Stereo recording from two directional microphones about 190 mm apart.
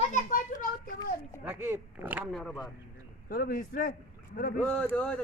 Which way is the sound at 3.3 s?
50° left (ahead or behind).